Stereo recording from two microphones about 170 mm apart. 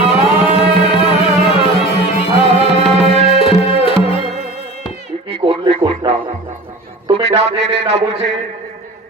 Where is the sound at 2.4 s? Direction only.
35° right (ahead or behind).